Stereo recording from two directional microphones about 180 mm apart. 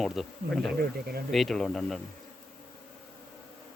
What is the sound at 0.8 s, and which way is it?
Speech, 60° right (ahead or behind).